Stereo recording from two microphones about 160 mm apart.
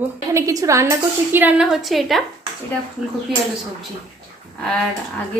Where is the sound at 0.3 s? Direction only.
20° right (ahead or behind); by 2.2 s centre (ahead or behind).